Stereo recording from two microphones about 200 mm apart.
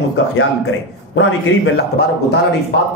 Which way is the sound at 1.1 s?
65° left (ahead or behind).